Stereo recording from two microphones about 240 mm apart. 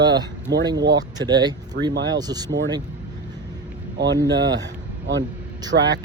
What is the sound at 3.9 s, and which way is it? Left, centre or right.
A man's voice, right.